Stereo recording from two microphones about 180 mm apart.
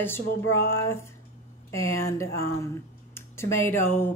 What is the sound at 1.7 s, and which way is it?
A woman's voice, 15° left (ahead or behind).